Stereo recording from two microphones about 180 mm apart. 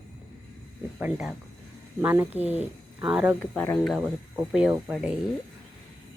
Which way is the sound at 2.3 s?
35° left (ahead or behind).